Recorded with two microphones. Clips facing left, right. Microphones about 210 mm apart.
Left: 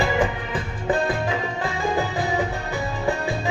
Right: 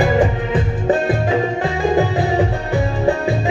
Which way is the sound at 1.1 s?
25° right (ahead or behind).